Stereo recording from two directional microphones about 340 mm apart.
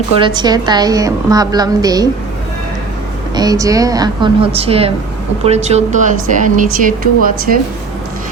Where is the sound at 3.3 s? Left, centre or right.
Centre.